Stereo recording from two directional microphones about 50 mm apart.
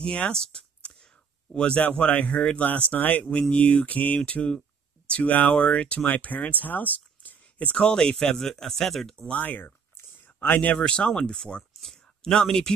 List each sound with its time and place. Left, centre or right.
0.0 s speech: centre
1.8 s speech: left
3.3 s speech: centre
3.8 s speech: left
6.6 s a sound: left
7.7 s speech: centre
9.3 s speech: left
10.2 s a sound: left
10.7 s speech: centre